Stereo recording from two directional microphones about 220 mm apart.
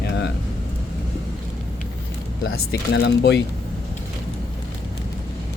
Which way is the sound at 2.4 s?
50° left (ahead or behind).